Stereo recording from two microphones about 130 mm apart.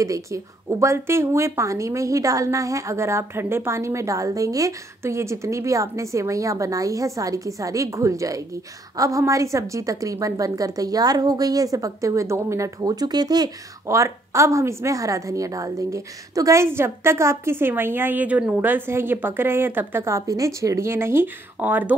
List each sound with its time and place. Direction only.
0.0 s a woman's voice: 25° right (ahead or behind)